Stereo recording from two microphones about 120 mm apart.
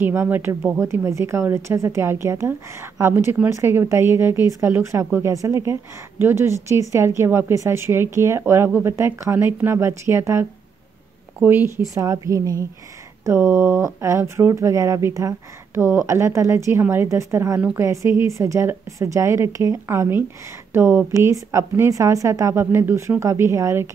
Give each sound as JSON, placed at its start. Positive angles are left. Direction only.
{"t": 0.0, "sound": "a woman's voice", "side_deg": -20}
{"t": 11.4, "sound": "a woman's voice", "side_deg": -20}